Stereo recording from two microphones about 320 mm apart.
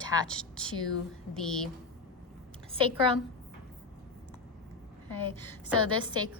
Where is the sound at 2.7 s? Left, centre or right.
Centre.